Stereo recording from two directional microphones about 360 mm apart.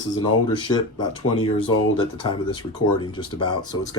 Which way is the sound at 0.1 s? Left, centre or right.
Centre.